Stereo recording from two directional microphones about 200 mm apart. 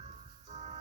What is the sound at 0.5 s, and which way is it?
Music, 35° right (ahead or behind).